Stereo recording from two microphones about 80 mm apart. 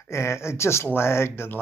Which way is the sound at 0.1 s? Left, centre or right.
Left.